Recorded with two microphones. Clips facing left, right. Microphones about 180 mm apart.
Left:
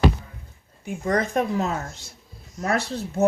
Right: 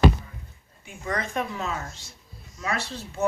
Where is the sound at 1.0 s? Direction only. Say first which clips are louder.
Left 6 dB; 40° left (ahead or behind).